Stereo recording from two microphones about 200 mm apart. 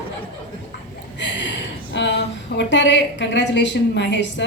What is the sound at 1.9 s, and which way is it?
A woman's voice, 60° left (ahead or behind).